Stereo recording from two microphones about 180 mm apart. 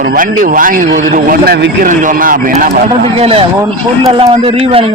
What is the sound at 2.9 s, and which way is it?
Speech, 35° right (ahead or behind).